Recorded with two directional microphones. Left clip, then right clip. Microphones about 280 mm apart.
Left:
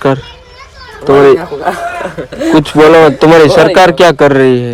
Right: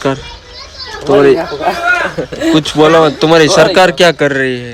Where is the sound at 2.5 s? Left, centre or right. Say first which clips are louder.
Left 4 dB; centre.